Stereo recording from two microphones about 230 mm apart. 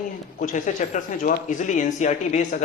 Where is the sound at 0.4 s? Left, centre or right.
Left.